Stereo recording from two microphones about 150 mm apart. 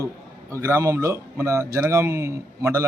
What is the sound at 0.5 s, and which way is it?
A man's voice, 15° right (ahead or behind).